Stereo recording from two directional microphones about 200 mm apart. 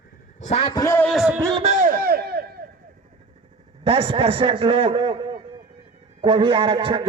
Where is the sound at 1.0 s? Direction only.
Centre (ahead or behind).